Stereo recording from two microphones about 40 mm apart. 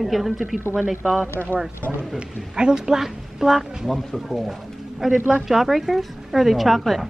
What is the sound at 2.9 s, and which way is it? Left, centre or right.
A woman's voice, centre.